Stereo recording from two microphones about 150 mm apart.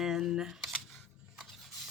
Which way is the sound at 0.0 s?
Centre (ahead or behind).